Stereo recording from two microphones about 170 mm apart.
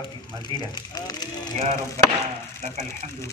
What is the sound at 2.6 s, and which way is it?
Speech, 40° right (ahead or behind).